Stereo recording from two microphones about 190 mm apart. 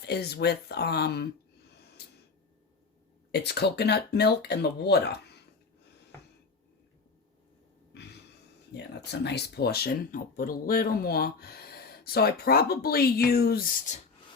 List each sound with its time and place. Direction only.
0.0 s speech: 60° left (ahead or behind)
3.3 s speech: 60° left (ahead or behind)
8.7 s speech: 60° left (ahead or behind)
13.9 s speech: 40° left (ahead or behind)